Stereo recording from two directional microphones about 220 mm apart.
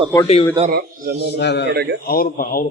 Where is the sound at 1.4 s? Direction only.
50° left (ahead or behind).